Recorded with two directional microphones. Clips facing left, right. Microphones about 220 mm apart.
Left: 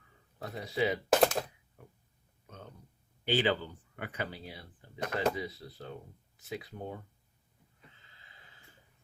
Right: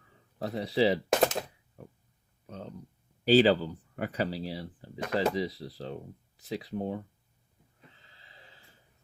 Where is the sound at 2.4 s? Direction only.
35° right (ahead or behind).